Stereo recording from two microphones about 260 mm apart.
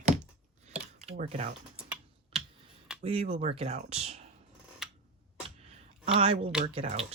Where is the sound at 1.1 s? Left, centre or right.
Right.